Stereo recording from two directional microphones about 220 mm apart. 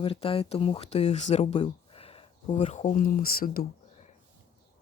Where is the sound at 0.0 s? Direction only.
25° left (ahead or behind); by 4.1 s 40° left (ahead or behind).